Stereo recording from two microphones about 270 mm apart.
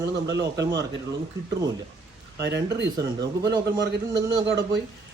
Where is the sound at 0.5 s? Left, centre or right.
Centre.